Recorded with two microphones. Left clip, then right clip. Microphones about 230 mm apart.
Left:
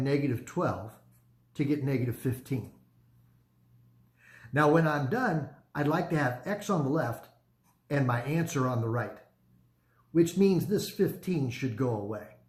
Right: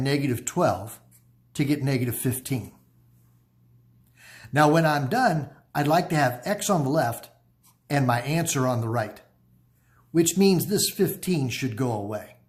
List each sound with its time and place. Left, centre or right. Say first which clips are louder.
0.0 s speech: right 4 dB; right
4.3 s speech: right 5 dB; right
10.2 s speech: right 4 dB; right